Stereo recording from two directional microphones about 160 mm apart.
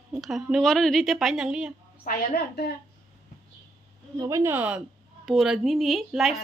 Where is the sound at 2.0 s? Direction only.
70° left (ahead or behind).